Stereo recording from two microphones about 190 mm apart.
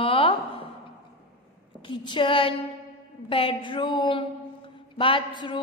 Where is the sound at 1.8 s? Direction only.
25° left (ahead or behind).